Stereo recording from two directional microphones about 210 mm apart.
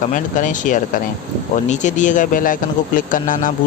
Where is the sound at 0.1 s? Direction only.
40° left (ahead or behind).